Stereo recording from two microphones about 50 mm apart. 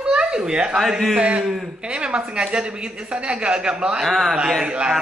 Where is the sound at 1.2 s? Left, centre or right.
Right.